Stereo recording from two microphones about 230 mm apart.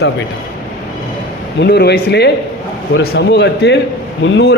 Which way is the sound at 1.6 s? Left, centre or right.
Left.